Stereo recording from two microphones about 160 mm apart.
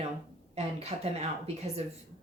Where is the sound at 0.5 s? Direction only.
40° right (ahead or behind).